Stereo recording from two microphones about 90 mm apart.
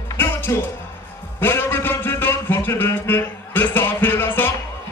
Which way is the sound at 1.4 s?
25° left (ahead or behind).